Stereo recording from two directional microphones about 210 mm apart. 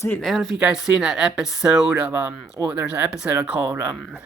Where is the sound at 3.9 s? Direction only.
Centre (ahead or behind).